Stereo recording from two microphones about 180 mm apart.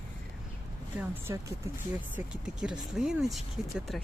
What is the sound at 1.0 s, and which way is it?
Speech, 15° right (ahead or behind).